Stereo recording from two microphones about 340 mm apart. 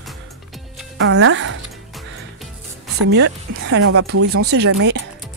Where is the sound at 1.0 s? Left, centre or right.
Right.